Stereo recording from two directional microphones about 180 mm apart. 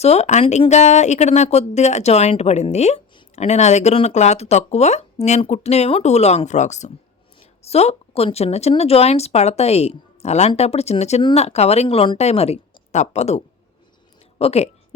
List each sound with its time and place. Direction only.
0.0 s a woman's voice: 35° left (ahead or behind)